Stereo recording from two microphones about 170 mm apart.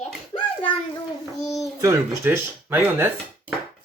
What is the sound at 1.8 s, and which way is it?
Speech, 15° right (ahead or behind).